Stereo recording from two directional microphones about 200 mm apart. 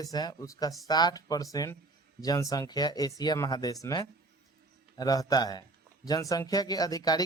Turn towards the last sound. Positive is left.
turn(degrees=20)  # may be behind; listen again after turning